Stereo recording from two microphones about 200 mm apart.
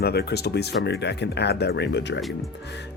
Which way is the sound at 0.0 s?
55° left (ahead or behind).